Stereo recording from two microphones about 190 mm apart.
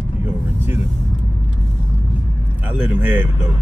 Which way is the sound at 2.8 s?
10° right (ahead or behind).